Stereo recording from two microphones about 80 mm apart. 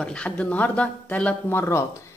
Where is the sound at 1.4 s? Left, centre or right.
Left.